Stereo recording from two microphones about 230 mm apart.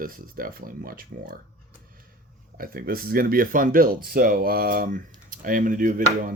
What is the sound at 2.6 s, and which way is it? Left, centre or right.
Speech, right.